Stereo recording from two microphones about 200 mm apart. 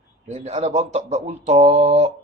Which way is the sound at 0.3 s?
35° right (ahead or behind).